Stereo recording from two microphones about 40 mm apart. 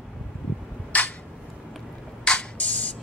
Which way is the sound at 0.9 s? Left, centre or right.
Left.